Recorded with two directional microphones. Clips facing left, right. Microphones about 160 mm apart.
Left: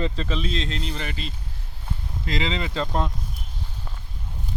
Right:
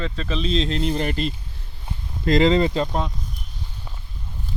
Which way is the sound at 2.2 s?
50° right (ahead or behind).